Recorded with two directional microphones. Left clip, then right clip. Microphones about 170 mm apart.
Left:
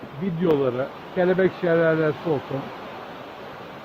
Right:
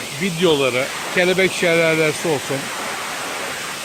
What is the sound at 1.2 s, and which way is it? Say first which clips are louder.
Speech: right 4 dB; 15° right (ahead or behind).